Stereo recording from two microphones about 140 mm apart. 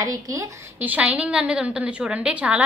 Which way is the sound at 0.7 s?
10° right (ahead or behind).